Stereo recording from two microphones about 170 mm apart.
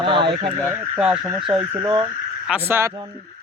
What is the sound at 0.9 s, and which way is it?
Speech, 5° right (ahead or behind).